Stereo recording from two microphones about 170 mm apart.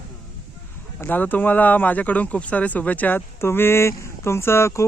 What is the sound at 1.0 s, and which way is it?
Speech, 10° left (ahead or behind).